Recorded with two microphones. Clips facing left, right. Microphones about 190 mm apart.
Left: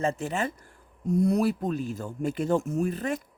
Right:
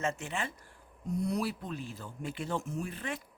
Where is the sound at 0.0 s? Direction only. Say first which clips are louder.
Left 7 dB; 35° left (ahead or behind).